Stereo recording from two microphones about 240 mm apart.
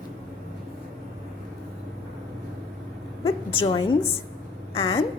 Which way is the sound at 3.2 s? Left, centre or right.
Left.